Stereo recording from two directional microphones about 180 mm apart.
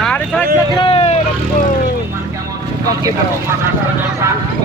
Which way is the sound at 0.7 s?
30° left (ahead or behind).